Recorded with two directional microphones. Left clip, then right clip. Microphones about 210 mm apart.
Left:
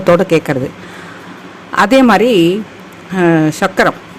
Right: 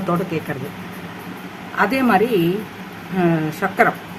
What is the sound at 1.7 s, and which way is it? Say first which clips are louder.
Speech: left 8 dB; 45° left (ahead or behind).